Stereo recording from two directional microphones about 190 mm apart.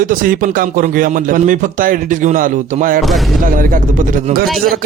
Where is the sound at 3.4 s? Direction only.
45° right (ahead or behind).